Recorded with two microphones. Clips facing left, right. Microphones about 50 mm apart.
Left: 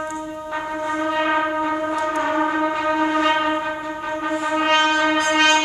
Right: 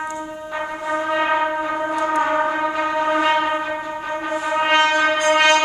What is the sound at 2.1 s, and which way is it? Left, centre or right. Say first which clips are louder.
Train: right 2 dB; centre.